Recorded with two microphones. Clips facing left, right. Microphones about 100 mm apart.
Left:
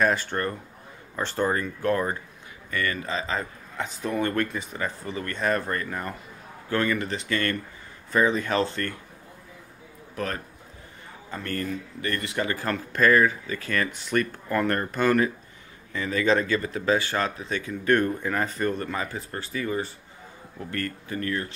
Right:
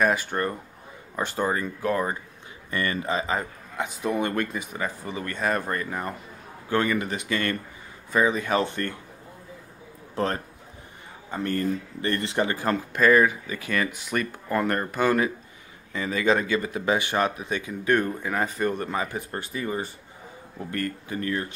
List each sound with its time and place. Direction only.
0.0 s a man's voice: 10° right (ahead or behind)
2.7 s a man's voice: 25° right (ahead or behind)
10.1 s a man's voice: 25° right (ahead or behind)
12.9 s a man's voice: 10° right (ahead or behind)